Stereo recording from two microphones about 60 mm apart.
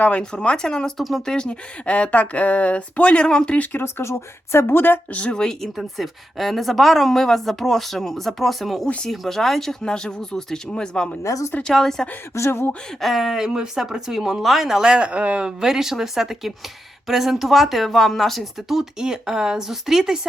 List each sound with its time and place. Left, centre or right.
0.0 s speech: centre
3.6 s speech: left
3.8 s speech: left
5.1 s speech: centre
5.7 s a woman's voice: centre
11.2 s speech: left
11.7 s speech: centre
12.5 s speech: left
13.0 s a woman's voice: centre